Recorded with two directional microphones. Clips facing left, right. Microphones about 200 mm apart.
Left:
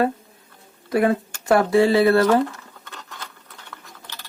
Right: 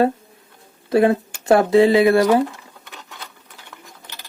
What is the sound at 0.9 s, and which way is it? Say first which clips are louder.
Speech: right 4 dB; 25° right (ahead or behind).